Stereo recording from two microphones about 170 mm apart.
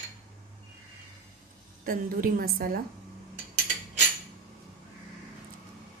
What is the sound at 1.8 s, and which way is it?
A woman's voice, 55° right (ahead or behind).